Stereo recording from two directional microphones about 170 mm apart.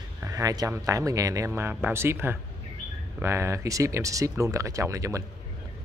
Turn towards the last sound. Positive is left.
turn(degrees=-20)  # may be behind; listen again after turning